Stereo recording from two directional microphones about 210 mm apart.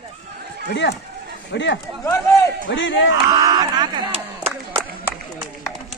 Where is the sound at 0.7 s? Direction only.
55° left (ahead or behind).